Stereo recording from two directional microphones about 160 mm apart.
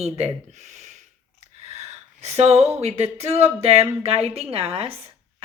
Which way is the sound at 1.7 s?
40° right (ahead or behind).